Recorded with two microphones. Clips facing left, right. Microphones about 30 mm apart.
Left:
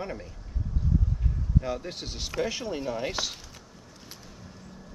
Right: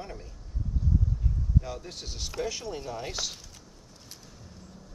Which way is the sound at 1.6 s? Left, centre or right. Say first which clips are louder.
Left 4 dB; left.